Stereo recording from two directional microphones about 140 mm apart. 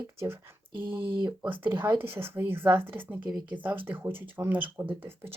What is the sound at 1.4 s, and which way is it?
Speech, 15° right (ahead or behind).